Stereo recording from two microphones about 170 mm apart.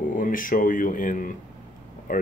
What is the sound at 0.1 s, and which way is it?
Speech, 55° left (ahead or behind).